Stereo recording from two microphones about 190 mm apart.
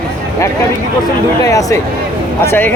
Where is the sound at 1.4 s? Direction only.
15° left (ahead or behind).